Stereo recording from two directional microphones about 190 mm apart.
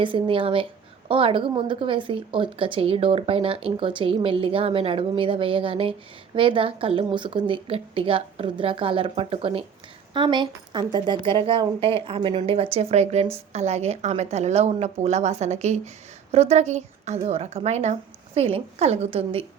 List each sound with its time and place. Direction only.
0.0 s a woman's voice: 25° right (ahead or behind)